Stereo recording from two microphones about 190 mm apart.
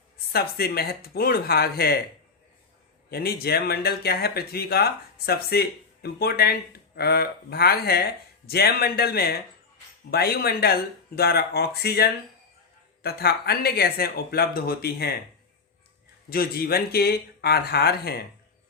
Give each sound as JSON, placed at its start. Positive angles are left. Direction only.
{"t": 0.3, "sound": "speech", "side_deg": 55}
{"t": 3.1, "sound": "speech", "side_deg": 55}
{"t": 16.3, "sound": "speech", "side_deg": 55}